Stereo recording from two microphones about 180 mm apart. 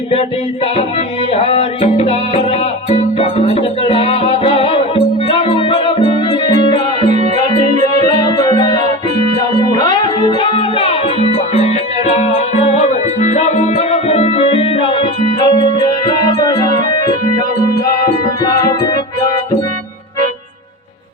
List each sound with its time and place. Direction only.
1.3 s music: 35° left (ahead or behind)
18.4 s music: 20° left (ahead or behind)